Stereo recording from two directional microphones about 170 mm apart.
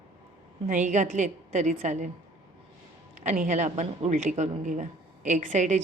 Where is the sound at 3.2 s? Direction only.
45° right (ahead or behind).